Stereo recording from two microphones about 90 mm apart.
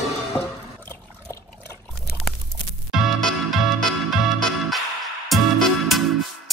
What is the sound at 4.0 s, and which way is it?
Music, centre (ahead or behind).